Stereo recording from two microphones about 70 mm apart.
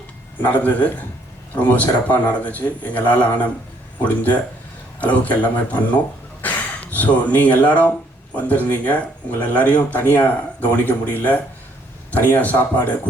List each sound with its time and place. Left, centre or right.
0.4 s speech: left
6.4 s a sound: left
8.3 s speech: left